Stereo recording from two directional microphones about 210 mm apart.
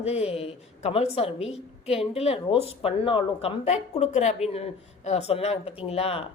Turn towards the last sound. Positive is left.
turn(degrees=30)  # may be behind; listen again after turning